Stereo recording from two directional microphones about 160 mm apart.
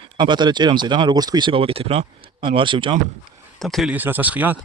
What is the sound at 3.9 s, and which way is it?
Speech, 10° right (ahead or behind).